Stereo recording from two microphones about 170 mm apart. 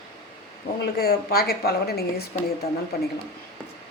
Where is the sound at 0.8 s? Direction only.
65° left (ahead or behind).